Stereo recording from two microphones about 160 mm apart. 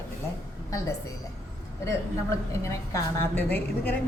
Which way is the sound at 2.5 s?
15° left (ahead or behind).